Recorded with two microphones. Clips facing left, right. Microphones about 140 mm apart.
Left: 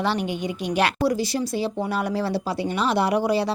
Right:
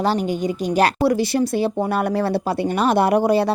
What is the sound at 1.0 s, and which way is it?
Speech, 60° right (ahead or behind).